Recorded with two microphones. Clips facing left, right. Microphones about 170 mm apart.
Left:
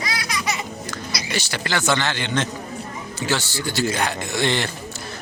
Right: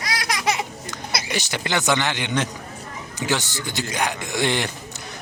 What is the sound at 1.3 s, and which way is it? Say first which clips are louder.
Speech: even; 15° right (ahead or behind).